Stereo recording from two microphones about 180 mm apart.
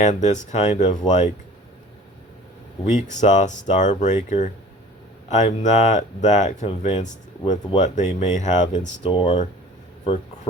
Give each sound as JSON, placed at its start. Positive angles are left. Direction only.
{"t": 0.0, "sound": "speech", "side_deg": 40}
{"t": 2.8, "sound": "speech", "side_deg": 40}
{"t": 9.2, "sound": "speech", "side_deg": 30}